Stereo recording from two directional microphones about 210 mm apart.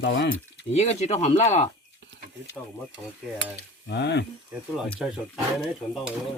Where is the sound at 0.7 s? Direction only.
30° left (ahead or behind).